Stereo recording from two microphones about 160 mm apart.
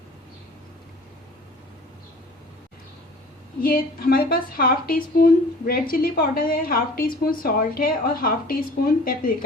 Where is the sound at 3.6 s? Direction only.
65° left (ahead or behind).